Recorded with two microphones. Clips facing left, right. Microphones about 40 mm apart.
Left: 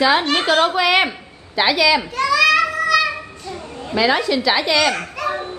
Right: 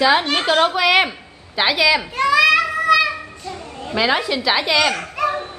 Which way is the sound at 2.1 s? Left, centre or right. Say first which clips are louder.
Right 1 dB; right.